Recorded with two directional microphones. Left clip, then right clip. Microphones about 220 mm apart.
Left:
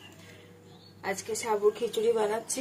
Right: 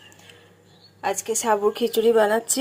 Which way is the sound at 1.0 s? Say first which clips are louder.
Right 9 dB; 30° right (ahead or behind).